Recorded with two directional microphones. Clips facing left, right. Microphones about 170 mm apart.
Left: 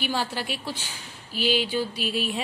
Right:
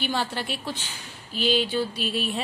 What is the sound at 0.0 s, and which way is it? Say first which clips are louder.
A woman's voice: even; 10° left (ahead or behind).